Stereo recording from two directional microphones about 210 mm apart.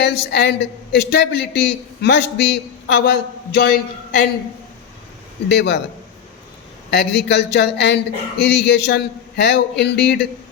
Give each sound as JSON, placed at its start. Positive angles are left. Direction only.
{"t": 0.0, "sound": "a woman's voice", "side_deg": 55}
{"t": 5.5, "sound": "a woman's voice", "side_deg": 50}
{"t": 6.9, "sound": "a woman's voice", "side_deg": 55}